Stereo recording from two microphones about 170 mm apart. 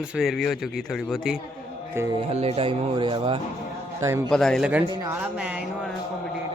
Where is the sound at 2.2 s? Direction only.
35° right (ahead or behind).